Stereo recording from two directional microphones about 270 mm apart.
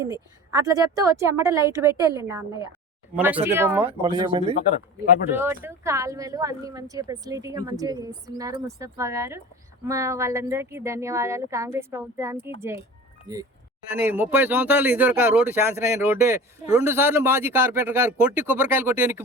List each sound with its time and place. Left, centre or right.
0.0 s speech: centre
3.4 s speech: centre
4.5 s speech: left
5.3 s speech: centre
13.9 s speech: centre